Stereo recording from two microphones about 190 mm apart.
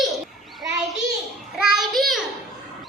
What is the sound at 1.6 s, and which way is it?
Child singing, centre (ahead or behind).